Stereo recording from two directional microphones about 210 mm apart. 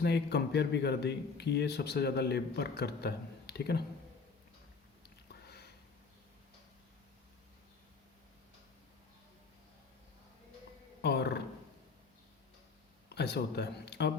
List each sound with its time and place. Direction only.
0.0 s speech: 50° left (ahead or behind)
5.0 s a sound: 50° left (ahead or behind)
11.0 s speech: 50° left (ahead or behind)
13.1 s speech: 50° left (ahead or behind)